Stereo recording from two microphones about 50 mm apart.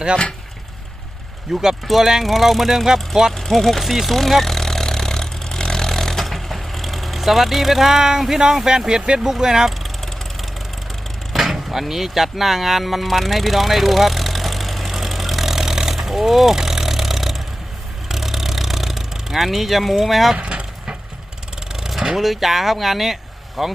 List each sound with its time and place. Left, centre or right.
1.6 s speech: centre
3.3 s vehicle: centre
9.3 s speech: centre
11.3 s music: centre
18.1 s vehicle: centre
20.3 s vehicle: right
21.7 s speech: centre